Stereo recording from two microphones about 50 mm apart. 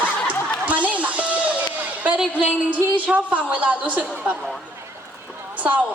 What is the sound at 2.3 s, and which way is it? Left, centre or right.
A woman's voice, right.